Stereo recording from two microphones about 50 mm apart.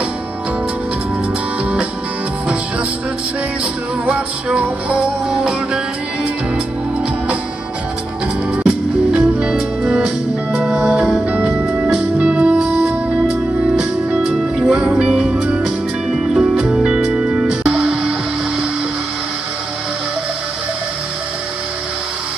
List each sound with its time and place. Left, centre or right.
4.0 s music: right
8.6 s music: right
14.7 s music: right